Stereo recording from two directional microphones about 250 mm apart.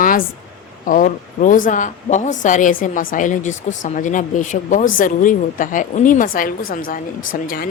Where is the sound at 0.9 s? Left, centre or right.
Left.